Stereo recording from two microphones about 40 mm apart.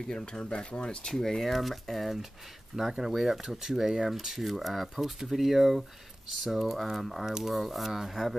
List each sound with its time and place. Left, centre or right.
0.1 s speech: left
1.0 s speech: centre
2.7 s speech: centre
3.1 s speech: centre